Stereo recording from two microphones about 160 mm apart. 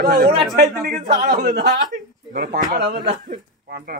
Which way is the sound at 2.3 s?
80° right.